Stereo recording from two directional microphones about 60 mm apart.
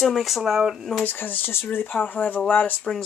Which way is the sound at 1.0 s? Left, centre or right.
Left.